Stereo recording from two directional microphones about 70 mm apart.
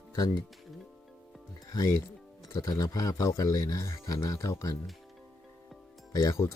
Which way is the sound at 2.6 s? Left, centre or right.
Left.